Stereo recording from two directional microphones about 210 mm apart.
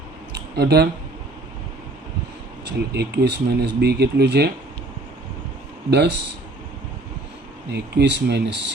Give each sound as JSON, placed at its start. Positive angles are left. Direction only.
{"t": 0.3, "sound": "a sound", "side_deg": -50}
{"t": 2.9, "sound": "speech", "side_deg": -50}
{"t": 5.9, "sound": "speech", "side_deg": -55}
{"t": 7.7, "sound": "speech", "side_deg": -55}